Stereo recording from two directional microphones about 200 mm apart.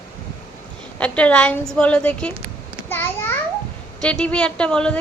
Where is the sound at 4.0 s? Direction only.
5° left (ahead or behind).